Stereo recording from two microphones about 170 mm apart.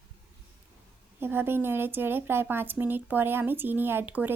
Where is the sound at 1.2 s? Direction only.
15° right (ahead or behind).